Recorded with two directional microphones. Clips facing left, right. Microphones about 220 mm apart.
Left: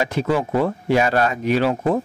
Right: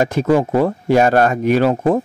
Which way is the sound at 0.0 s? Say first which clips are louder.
Right 6 dB; 45° right (ahead or behind).